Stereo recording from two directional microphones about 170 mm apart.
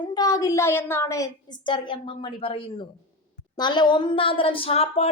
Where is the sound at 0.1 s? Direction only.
25° left (ahead or behind).